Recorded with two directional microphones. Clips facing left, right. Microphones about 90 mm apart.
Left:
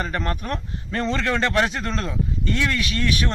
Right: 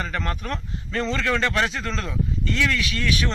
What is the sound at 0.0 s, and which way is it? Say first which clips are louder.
Speech: left 2 dB; 20° left (ahead or behind).